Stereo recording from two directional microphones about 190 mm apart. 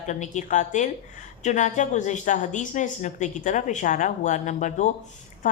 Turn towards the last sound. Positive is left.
turn(degrees=40)  # may be behind; listen again after turning